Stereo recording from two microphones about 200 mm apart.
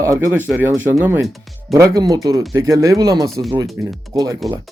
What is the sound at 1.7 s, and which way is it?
Speech, 15° right (ahead or behind).